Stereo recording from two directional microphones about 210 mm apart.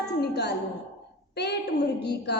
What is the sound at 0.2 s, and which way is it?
Speech, 50° left (ahead or behind).